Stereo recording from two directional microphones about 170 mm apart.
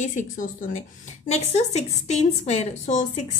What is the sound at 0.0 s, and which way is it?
A woman's voice, 50° left (ahead or behind).